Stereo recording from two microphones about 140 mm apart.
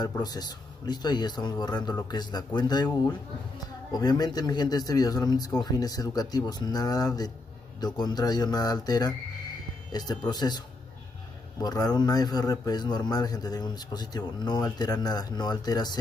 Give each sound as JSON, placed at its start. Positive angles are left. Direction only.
{"t": 0.0, "sound": "a man's voice", "side_deg": 30}
{"t": 11.6, "sound": "a man's voice", "side_deg": 30}